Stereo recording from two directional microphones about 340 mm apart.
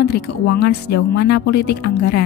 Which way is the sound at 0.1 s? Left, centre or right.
Left.